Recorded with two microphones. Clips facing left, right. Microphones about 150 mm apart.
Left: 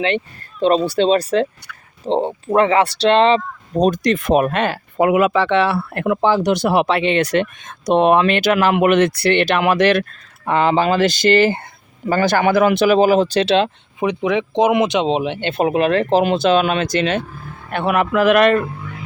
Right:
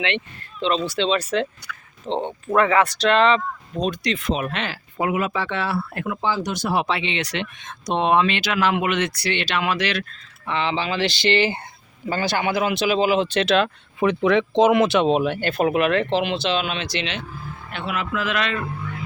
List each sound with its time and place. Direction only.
0.6 s speech: 45° left (ahead or behind)
14.0 s a man's voice: 15° left (ahead or behind); by 18.6 s 55° left (ahead or behind)